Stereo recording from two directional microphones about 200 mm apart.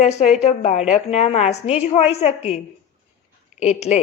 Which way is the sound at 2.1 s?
35° left (ahead or behind).